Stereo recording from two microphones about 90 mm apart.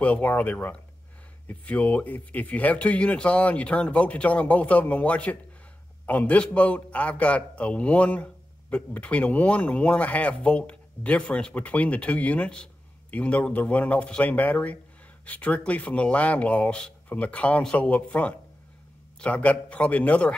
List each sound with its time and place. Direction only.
0.0 s a man's voice: 15° left (ahead or behind)